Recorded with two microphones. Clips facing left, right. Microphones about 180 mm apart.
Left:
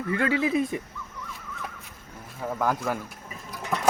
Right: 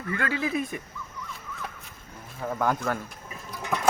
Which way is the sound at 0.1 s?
25° left (ahead or behind).